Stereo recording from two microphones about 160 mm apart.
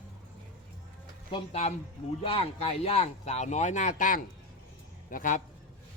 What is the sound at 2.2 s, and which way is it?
A man's voice, 35° left (ahead or behind).